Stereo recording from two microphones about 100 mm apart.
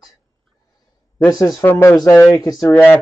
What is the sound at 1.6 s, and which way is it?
Speech, 25° left (ahead or behind).